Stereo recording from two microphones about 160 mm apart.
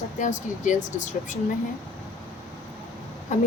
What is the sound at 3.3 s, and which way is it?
Speech, 50° left (ahead or behind).